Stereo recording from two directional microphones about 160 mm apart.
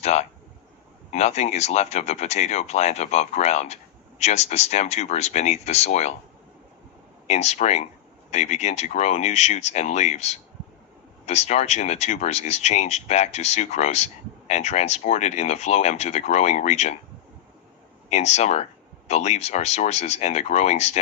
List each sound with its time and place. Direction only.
0.0 s speech: 40° left (ahead or behind)
7.3 s speech: 45° left (ahead or behind)
18.1 s speech: 45° left (ahead or behind)